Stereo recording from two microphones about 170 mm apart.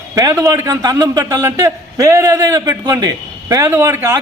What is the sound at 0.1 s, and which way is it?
A man's voice, 15° right (ahead or behind).